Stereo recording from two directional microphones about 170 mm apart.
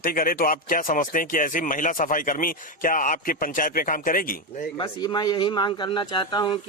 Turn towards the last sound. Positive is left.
turn(degrees=25)  # may be behind; listen again after turning